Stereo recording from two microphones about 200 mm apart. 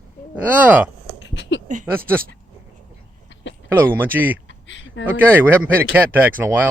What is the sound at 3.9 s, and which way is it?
Speech, 10° right (ahead or behind).